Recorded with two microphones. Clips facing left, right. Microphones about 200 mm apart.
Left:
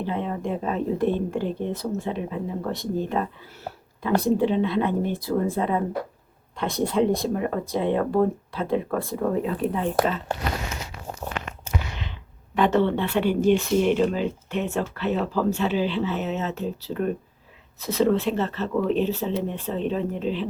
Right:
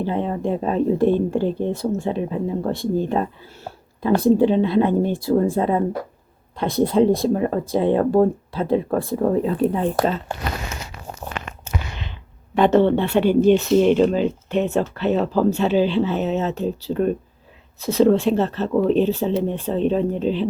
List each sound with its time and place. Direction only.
0.0 s speech: 35° right (ahead or behind)
12.5 s speech: 25° right (ahead or behind)